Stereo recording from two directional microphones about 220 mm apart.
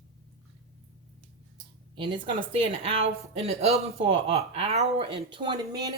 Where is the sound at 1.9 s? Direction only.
20° right (ahead or behind).